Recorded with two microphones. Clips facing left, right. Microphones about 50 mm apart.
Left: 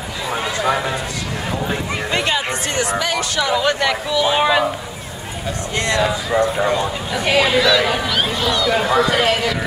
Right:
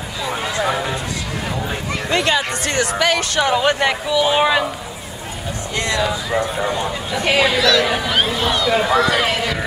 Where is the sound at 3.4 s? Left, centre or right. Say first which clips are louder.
Right 1 dB; right.